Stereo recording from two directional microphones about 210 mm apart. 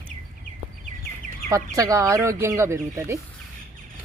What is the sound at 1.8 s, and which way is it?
Speech, 15° right (ahead or behind).